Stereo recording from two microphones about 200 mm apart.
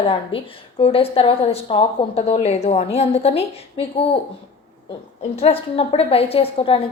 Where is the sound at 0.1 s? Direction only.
25° left (ahead or behind).